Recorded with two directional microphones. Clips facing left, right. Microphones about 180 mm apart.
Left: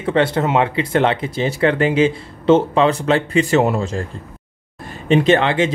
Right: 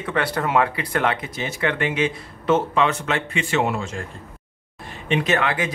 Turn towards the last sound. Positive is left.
turn(degrees=25)  # may be behind; listen again after turning